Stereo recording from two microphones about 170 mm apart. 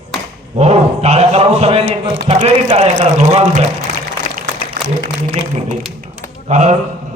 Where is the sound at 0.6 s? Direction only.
35° right (ahead or behind).